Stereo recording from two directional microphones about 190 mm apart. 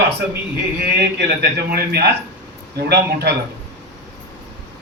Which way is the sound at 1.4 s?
60° right (ahead or behind).